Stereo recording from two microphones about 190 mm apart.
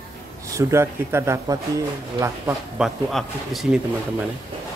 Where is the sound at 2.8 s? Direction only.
Centre (ahead or behind).